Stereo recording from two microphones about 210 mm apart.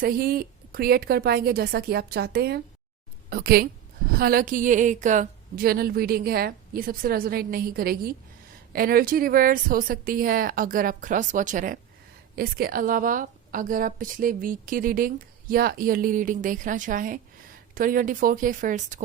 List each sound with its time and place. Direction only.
0.0 s a woman's voice: 45° right (ahead or behind)